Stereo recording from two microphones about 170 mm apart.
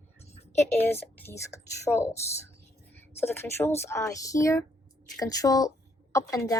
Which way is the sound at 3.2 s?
15° left (ahead or behind).